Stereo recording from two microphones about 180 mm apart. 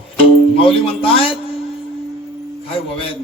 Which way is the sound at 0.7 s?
30° left (ahead or behind).